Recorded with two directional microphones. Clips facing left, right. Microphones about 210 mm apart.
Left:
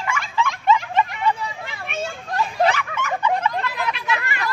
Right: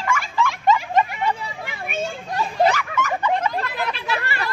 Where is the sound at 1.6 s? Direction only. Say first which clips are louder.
Right 5 dB; 10° right (ahead or behind).